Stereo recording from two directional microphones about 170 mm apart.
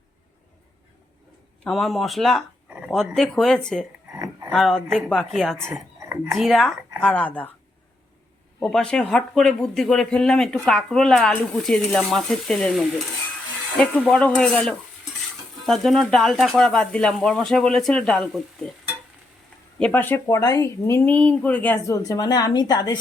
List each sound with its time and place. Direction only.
1.6 s speech: centre (ahead or behind)
4.1 s a sound: 15° right (ahead or behind)
4.5 s speech: centre (ahead or behind)
5.7 s a sound: 15° right (ahead or behind)
6.3 s speech: centre (ahead or behind)
8.6 s speech: 5° left (ahead or behind)
14.0 s speech: 5° left (ahead or behind)
19.8 s speech: 10° left (ahead or behind)